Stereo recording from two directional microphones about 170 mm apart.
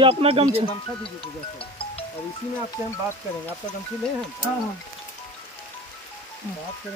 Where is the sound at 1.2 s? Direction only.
35° left (ahead or behind).